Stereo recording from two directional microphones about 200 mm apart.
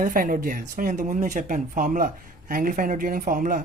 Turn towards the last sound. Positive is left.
turn(degrees=-45)  # may be behind; listen again after turning